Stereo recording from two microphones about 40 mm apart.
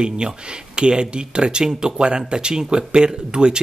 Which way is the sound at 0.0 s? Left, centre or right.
Right.